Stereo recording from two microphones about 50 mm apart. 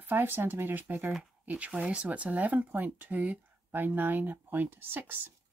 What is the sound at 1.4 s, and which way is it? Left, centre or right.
Speech, right.